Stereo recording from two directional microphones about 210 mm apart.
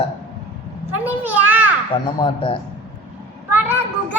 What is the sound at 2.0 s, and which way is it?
Speech, 25° left (ahead or behind).